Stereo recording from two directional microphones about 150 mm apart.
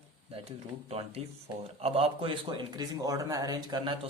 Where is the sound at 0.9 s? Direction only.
40° right (ahead or behind).